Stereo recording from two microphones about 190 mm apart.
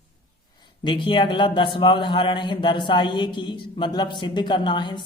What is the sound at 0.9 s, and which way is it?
A woman's voice, 25° left (ahead or behind).